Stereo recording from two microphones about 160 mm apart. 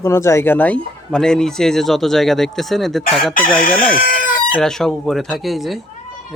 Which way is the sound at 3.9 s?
60° left (ahead or behind).